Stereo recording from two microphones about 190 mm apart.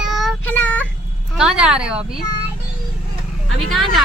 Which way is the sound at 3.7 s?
Centre (ahead or behind).